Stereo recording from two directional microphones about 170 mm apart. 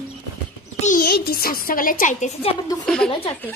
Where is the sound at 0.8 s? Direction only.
60° left (ahead or behind); by 2.5 s 45° left (ahead or behind).